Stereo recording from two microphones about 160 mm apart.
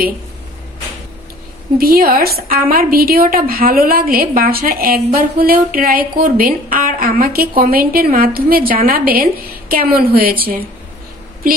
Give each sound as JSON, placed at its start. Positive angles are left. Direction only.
{"t": 1.8, "sound": "a woman's voice", "side_deg": -70}